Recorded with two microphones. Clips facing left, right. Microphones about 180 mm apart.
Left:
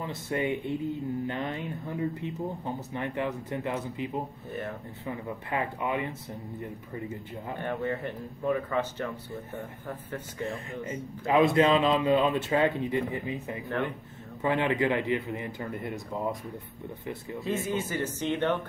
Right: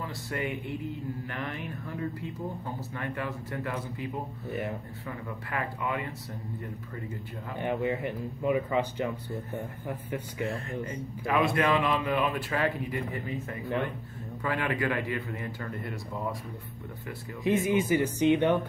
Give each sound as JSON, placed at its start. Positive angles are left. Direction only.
{"t": 0.0, "sound": "speech", "side_deg": 20}
{"t": 4.5, "sound": "speech", "side_deg": -15}
{"t": 5.0, "sound": "speech", "side_deg": 20}
{"t": 7.5, "sound": "speech", "side_deg": -15}
{"t": 11.2, "sound": "speech", "side_deg": 20}
{"t": 17.4, "sound": "speech", "side_deg": -15}